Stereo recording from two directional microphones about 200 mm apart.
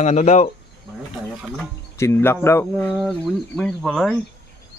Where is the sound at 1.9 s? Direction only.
15° left (ahead or behind).